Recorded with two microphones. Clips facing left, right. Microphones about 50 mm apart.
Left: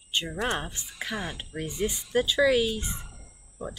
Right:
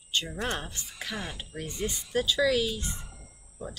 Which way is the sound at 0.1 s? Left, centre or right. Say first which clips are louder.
Left 2 dB; centre.